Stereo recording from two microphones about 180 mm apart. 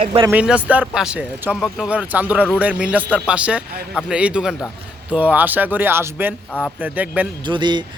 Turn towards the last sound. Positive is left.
turn(degrees=-25)  # may be behind; listen again after turning